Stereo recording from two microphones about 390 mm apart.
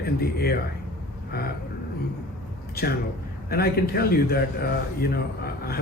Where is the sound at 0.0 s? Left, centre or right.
Left.